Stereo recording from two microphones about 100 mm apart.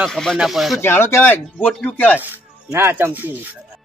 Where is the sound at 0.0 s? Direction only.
5° left (ahead or behind).